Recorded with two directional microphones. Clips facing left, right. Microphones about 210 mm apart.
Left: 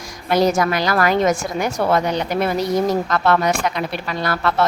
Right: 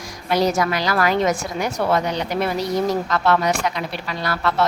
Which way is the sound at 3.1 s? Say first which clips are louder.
Left 1 dB; 50° left (ahead or behind).